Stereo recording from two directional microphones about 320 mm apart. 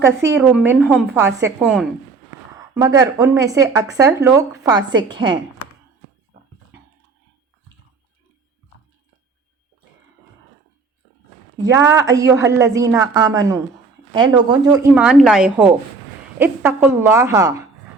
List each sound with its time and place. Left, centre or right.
0.2 s a woman's voice: centre
4.8 s a woman's voice: right
5.0 s a woman's voice: centre
11.5 s a woman's voice: centre